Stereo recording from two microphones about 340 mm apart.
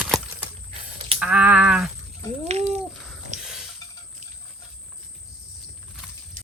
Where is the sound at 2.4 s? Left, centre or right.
Centre.